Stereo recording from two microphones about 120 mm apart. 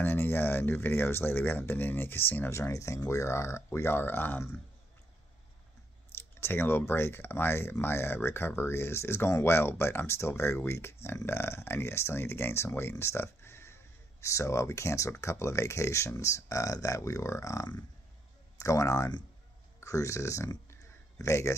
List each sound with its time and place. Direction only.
0.0 s speech: 15° left (ahead or behind)
6.1 s speech: 20° left (ahead or behind)